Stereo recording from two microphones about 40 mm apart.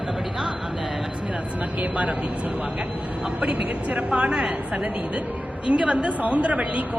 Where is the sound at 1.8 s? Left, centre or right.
Right.